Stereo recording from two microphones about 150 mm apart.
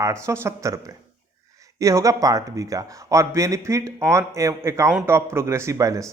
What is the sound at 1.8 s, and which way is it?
Speech, 20° right (ahead or behind).